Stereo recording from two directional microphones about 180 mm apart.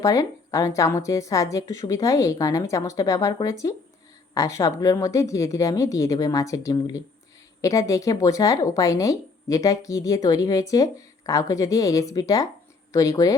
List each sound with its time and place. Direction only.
0.0 s a woman's voice: 20° left (ahead or behind)